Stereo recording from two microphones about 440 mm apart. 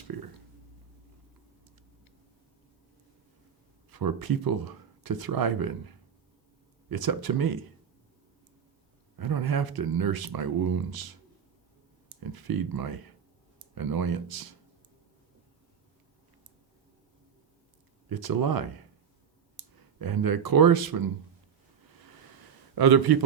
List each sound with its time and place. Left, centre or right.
3.8 s speech: right
9.1 s speech: right
12.2 s speech: right
18.1 s speech: right
20.0 s speech: right
22.7 s a man's voice: right